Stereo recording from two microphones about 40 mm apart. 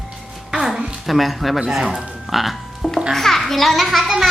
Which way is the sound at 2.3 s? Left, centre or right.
Centre.